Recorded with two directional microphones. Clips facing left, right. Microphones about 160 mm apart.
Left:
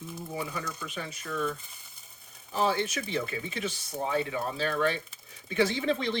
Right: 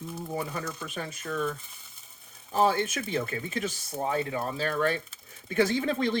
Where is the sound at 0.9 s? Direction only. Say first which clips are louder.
Right 2 dB; 50° right (ahead or behind).